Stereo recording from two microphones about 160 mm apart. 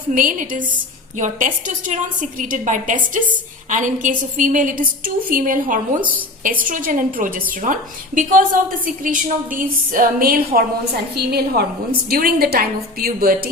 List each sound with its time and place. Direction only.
0.1 s a woman's voice: 55° right (ahead or behind)
11.1 s a woman's voice: 85° right; by 13.5 s 70° right (ahead or behind)